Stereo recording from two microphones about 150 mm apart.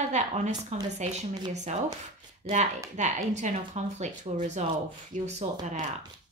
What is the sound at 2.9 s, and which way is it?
Speech, 55° right (ahead or behind).